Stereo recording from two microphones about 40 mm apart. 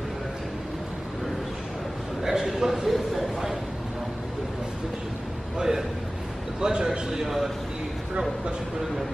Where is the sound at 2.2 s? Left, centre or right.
Centre.